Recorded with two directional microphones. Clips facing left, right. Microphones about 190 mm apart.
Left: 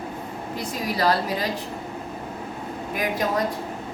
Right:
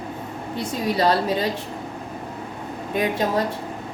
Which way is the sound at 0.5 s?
25° right (ahead or behind).